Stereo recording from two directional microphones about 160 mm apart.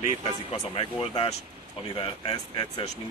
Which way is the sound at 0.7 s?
35° left (ahead or behind).